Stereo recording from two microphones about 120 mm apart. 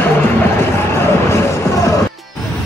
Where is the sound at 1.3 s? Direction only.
25° left (ahead or behind).